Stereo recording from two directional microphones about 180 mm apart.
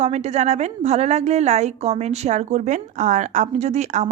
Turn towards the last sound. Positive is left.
turn(degrees=-40)  # may be behind; listen again after turning